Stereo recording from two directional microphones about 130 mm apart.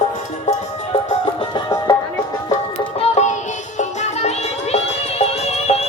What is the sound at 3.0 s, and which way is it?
Music, 65° left (ahead or behind).